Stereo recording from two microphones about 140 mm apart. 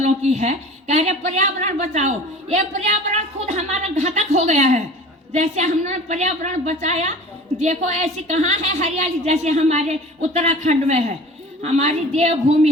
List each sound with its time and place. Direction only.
0.0 s a woman's voice: 55° right (ahead or behind)